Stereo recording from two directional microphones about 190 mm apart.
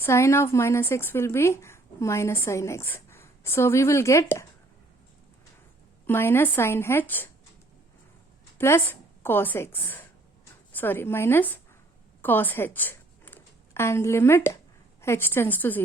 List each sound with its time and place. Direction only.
0.0 s a woman's voice: 15° left (ahead or behind)
6.1 s a woman's voice: 10° left (ahead or behind)
8.5 s a woman's voice: 10° left (ahead or behind)